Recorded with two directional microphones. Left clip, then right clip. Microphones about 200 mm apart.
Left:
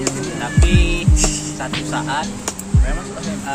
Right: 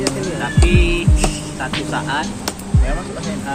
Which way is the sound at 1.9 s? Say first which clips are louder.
Even; 55° left (ahead or behind).